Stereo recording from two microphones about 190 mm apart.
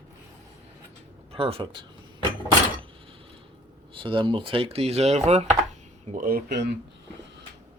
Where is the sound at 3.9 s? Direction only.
25° right (ahead or behind).